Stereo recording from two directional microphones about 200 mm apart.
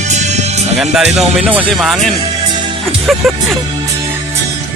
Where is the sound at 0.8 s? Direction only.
Centre (ahead or behind).